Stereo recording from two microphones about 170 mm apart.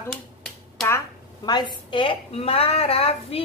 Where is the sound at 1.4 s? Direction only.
25° left (ahead or behind).